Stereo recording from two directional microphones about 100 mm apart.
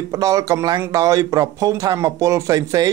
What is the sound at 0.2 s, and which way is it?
Speech, 35° right (ahead or behind).